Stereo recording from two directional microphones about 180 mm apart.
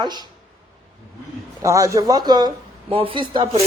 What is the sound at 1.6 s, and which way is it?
Speech, 15° right (ahead or behind).